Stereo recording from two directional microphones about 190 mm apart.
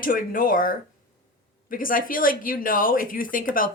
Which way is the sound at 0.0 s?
45° left (ahead or behind).